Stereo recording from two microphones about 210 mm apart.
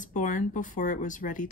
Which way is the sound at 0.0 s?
40° left (ahead or behind).